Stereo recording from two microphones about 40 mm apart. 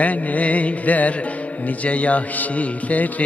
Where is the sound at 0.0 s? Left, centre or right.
Left.